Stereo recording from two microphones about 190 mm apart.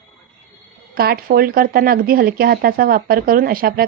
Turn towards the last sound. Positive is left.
turn(degrees=-50)  # may be behind; listen again after turning